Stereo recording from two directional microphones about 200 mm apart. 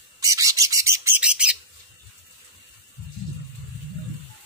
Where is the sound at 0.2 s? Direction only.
15° right (ahead or behind).